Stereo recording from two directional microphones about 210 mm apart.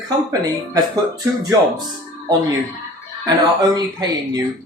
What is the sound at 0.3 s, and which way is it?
Speech, 15° right (ahead or behind).